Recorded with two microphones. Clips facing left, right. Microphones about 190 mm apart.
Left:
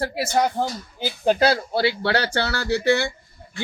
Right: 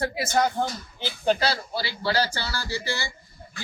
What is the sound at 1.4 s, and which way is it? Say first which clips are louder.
Speech: left 8 dB; 55° left (ahead or behind).